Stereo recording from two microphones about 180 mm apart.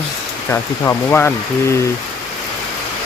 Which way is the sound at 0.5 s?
10° left (ahead or behind).